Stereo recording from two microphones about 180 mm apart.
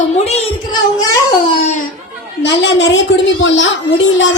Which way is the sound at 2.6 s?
90° left.